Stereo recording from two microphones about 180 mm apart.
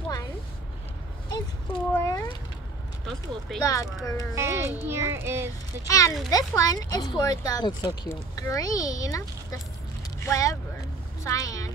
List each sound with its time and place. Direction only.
2.0 s cat: 15° left (ahead or behind)
3.1 s speech: centre (ahead or behind)
3.6 s speech: 20° left (ahead or behind)
4.4 s a child's voice: 15° right (ahead or behind)
5.9 s speech: 20° left (ahead or behind)